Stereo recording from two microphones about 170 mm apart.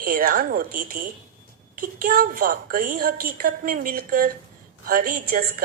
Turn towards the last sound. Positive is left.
turn(degrees=-55)  # may be behind; listen again after turning